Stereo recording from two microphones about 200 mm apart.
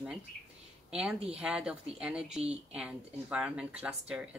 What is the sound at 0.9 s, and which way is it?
Speech, 5° right (ahead or behind).